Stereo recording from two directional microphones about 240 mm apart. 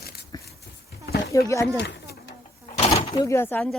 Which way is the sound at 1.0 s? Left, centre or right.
Left.